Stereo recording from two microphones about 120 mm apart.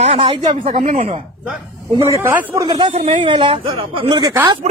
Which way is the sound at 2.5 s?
35° right (ahead or behind).